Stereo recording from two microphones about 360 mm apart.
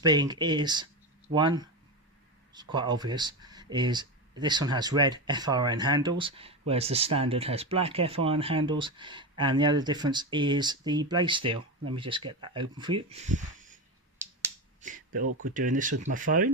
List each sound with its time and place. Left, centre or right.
0.0 s speech: centre
14.8 s finger snapping: right
15.5 s speech: right